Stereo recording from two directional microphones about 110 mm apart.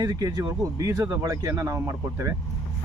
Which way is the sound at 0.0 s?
35° right (ahead or behind).